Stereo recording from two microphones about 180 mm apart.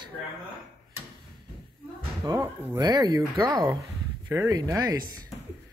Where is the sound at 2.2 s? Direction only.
20° right (ahead or behind).